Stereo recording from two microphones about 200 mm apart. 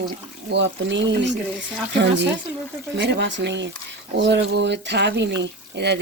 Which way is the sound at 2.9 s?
60° right (ahead or behind).